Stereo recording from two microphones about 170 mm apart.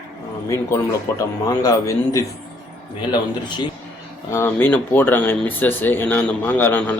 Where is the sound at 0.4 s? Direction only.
15° left (ahead or behind).